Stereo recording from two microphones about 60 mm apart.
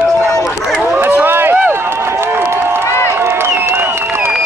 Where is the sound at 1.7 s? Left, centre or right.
Right.